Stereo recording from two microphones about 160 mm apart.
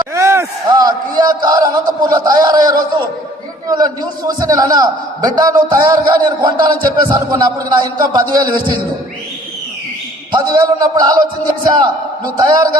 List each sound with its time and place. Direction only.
0.0 s a man's voice: 15° right (ahead or behind)
10.3 s a man's voice: 25° right (ahead or behind)